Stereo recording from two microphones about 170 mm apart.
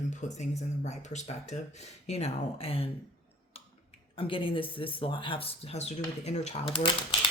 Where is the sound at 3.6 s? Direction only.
35° left (ahead or behind).